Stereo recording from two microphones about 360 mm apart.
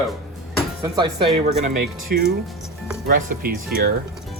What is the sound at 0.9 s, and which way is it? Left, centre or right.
Speech, centre.